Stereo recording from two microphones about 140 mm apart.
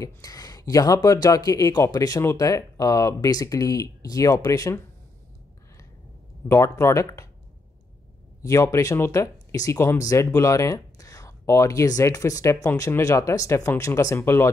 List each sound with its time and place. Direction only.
0.0 s speech: 25° left (ahead or behind)
6.5 s speech: 20° left (ahead or behind)
8.4 s speech: 20° left (ahead or behind)